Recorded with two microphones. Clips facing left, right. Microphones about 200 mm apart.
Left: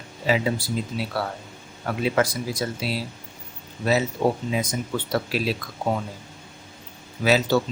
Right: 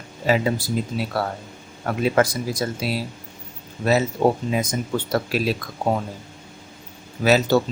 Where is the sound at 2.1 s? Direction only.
45° right (ahead or behind).